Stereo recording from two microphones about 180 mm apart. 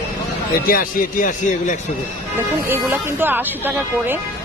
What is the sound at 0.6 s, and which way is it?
Speech, 50° left (ahead or behind).